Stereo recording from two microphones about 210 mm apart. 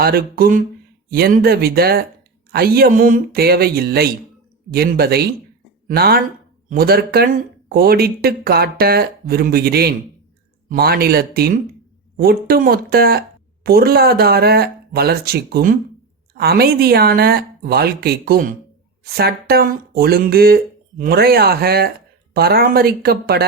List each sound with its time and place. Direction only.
0.0 s speech: 45° right (ahead or behind)